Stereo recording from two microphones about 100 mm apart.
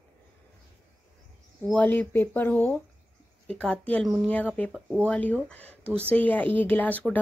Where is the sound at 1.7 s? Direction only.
15° left (ahead or behind).